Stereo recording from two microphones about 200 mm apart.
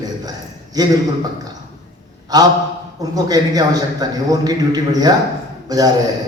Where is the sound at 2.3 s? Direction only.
20° right (ahead or behind).